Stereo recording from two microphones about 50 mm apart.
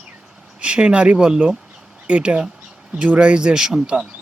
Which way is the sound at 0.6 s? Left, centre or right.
Right.